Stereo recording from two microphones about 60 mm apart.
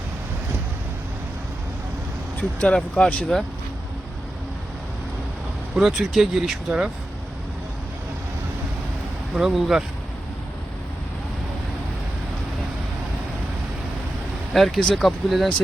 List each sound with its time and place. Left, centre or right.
2.6 s speech: centre
5.7 s speech: centre
9.3 s speech: centre
14.5 s speech: centre